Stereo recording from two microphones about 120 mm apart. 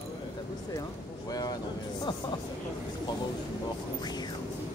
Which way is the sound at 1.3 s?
30° left (ahead or behind).